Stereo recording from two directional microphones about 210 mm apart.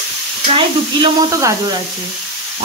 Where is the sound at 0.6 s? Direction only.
20° right (ahead or behind).